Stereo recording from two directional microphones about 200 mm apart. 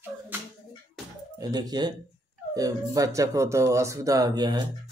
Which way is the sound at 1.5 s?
20° right (ahead or behind).